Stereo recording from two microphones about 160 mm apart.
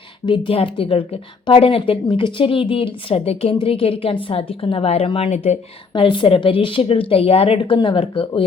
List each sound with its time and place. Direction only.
0.3 s a woman's voice: 30° left (ahead or behind)